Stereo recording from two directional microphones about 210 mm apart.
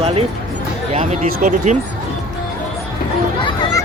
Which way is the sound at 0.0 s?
30° right (ahead or behind).